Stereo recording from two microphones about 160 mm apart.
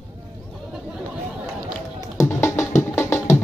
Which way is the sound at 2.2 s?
15° left (ahead or behind).